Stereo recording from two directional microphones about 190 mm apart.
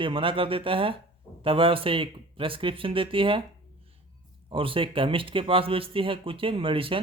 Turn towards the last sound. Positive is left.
turn(degrees=-30)  # may be behind; listen again after turning